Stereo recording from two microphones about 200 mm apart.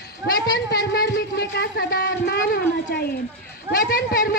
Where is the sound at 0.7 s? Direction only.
50° left (ahead or behind).